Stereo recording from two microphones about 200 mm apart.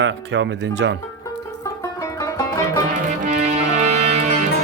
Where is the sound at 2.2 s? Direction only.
15° left (ahead or behind).